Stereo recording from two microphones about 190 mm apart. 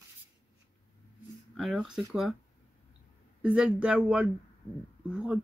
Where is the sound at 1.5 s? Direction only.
Centre (ahead or behind).